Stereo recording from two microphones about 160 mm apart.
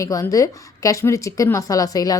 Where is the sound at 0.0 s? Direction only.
20° left (ahead or behind).